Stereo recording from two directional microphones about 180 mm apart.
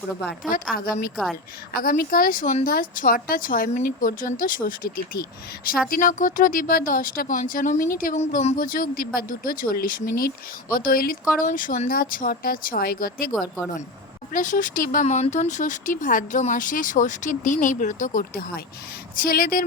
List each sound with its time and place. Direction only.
0.5 s speech: 50° left (ahead or behind)
1.1 s a woman's voice: centre (ahead or behind)
1.7 s speech: 55° left (ahead or behind)
14.3 s speech: 45° left (ahead or behind)